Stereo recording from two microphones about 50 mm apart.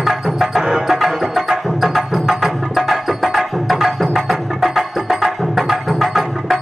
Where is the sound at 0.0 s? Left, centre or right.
Centre.